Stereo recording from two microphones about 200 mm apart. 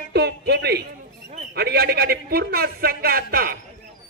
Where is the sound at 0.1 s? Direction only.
55° right (ahead or behind).